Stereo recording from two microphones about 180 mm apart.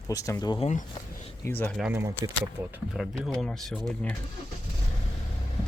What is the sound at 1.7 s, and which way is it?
Speech, 5° right (ahead or behind).